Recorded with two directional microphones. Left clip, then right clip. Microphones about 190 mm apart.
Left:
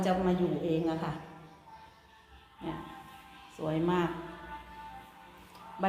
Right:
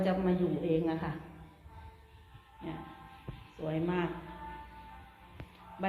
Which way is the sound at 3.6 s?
15° left (ahead or behind).